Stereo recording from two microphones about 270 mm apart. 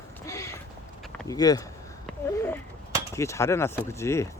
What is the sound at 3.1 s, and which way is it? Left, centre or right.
Speech, centre.